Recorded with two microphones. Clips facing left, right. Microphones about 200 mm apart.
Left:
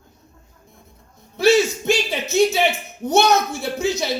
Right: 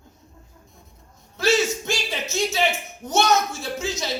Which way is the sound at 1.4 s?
60° left (ahead or behind).